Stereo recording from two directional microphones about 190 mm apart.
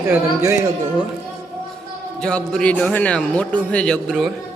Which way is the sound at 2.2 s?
5° left (ahead or behind).